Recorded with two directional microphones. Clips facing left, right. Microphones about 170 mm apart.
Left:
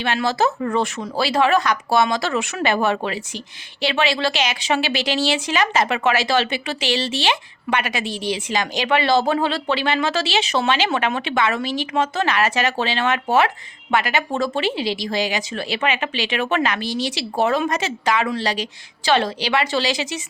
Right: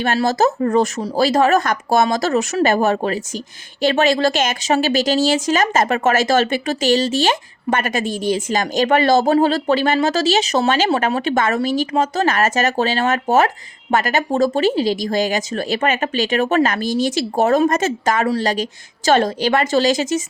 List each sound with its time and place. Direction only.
0.0 s speech: 45° right (ahead or behind)